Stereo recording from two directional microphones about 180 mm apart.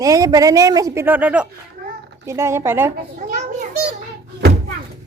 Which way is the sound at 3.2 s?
40° right (ahead or behind).